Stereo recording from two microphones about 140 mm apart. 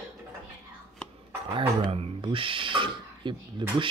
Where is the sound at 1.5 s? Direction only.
40° right (ahead or behind).